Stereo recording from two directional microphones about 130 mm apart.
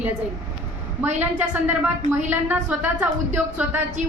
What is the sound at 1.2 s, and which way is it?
A woman's voice, 10° right (ahead or behind).